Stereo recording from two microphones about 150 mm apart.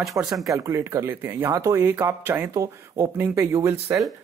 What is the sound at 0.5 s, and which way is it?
Speech, 20° right (ahead or behind).